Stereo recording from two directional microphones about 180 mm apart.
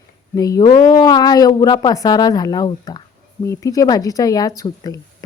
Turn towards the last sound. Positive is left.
turn(degrees=20)  # may be behind; listen again after turning